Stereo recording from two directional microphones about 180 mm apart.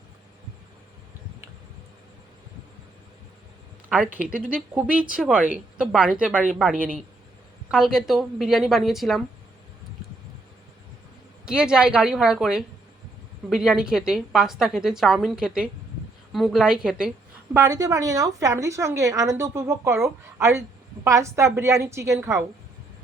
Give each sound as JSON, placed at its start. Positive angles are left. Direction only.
{"t": 3.8, "sound": "a woman's voice", "side_deg": -5}
{"t": 11.4, "sound": "a woman's voice", "side_deg": -5}
{"t": 17.5, "sound": "a woman's voice", "side_deg": -15}